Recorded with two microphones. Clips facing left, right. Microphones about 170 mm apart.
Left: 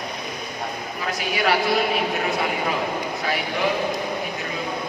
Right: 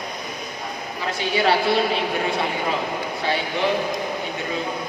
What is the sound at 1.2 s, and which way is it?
Speech, 30° right (ahead or behind).